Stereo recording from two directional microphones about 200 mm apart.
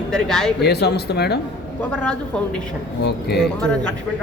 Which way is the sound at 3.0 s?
55° left (ahead or behind).